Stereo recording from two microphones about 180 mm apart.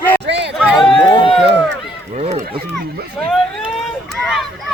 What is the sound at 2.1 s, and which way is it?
Run, 40° right (ahead or behind).